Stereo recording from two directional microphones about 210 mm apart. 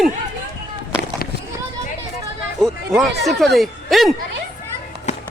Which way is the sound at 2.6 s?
Centre (ahead or behind).